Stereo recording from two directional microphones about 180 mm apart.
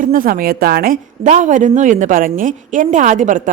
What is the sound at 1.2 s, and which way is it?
A woman's voice, 40° right (ahead or behind).